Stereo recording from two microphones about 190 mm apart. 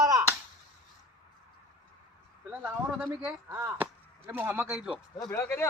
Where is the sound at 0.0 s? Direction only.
15° right (ahead or behind).